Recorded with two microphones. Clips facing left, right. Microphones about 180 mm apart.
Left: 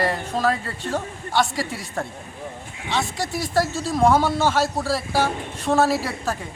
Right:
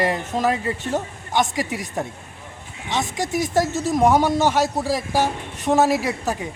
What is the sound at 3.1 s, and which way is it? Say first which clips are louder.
Speech: right 4 dB; 20° right (ahead or behind).